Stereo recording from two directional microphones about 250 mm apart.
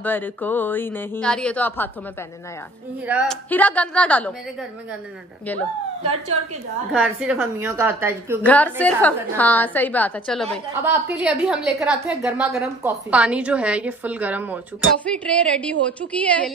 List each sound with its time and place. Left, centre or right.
0.0 s a woman's voice: centre
3.1 s a woman's voice: centre
6.0 s a woman's voice: right
6.9 s a woman's voice: centre
8.5 s a woman's voice: centre
15.0 s a woman's voice: centre